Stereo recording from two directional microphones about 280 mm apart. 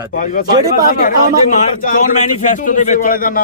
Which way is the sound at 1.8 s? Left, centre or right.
Left.